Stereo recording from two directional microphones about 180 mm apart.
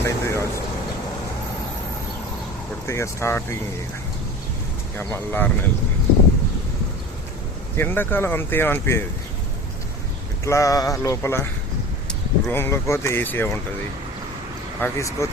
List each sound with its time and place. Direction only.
0.0 s vehicle: 15° left (ahead or behind)
2.8 s speech: 15° left (ahead or behind)
4.9 s speech: 10° left (ahead or behind)
7.8 s speech: 10° left (ahead or behind)
10.4 s speech: 15° left (ahead or behind)
14.8 s speech: 15° left (ahead or behind)